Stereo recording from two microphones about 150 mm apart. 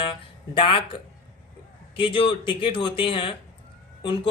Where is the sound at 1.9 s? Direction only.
35° left (ahead or behind).